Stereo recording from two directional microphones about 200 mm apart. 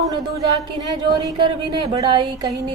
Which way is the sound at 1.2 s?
25° right (ahead or behind).